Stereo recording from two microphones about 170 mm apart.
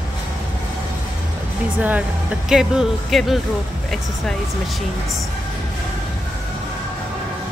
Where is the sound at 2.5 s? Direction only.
Centre (ahead or behind).